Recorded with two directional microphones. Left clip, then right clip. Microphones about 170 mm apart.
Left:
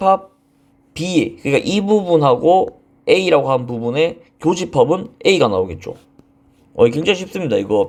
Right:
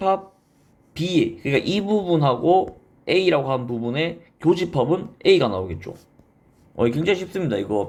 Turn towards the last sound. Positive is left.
turn(degrees=35)  # may be behind; listen again after turning